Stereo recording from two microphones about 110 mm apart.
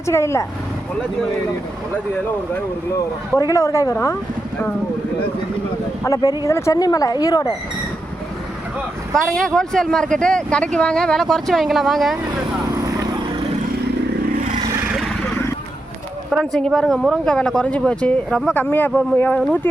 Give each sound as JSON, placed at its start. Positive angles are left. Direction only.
{"t": 0.0, "sound": "speech", "side_deg": 25}
{"t": 3.3, "sound": "speech", "side_deg": 30}
{"t": 6.0, "sound": "speech", "side_deg": 30}
{"t": 9.2, "sound": "speech", "side_deg": 5}
{"t": 14.9, "sound": "vehicle", "side_deg": 0}
{"t": 16.3, "sound": "speech", "side_deg": 5}